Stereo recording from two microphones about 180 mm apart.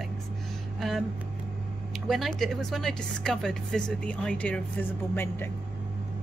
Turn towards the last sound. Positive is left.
turn(degrees=10)  # may be behind; listen again after turning